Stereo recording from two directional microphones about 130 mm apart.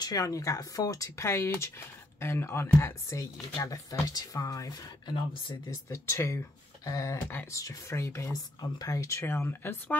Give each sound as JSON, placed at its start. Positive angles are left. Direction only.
{"t": 0.0, "sound": "speech", "side_deg": 30}